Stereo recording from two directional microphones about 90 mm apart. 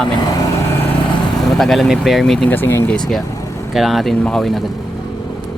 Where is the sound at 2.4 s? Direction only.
25° left (ahead or behind).